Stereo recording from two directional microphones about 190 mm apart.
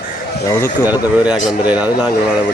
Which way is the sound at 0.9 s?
10° right (ahead or behind).